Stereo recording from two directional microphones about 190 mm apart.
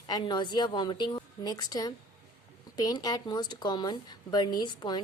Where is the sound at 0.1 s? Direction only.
25° left (ahead or behind).